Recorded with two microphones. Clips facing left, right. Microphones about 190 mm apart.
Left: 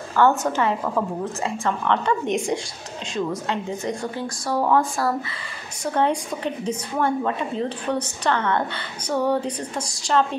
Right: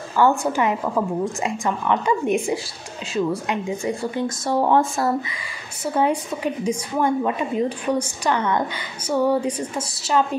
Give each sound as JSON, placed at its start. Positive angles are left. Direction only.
{"t": 0.2, "sound": "a woman's voice", "side_deg": -10}
{"t": 4.5, "sound": "speech", "side_deg": -25}
{"t": 5.9, "sound": "a woman's voice", "side_deg": -10}